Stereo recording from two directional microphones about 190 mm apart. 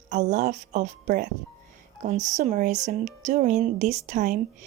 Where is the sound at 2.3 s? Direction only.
40° right (ahead or behind).